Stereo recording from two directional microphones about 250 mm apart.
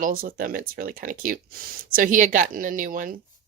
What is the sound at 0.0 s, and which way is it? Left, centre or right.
Speech, right.